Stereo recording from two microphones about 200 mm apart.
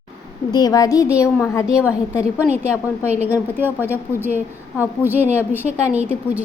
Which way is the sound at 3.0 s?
10° right (ahead or behind).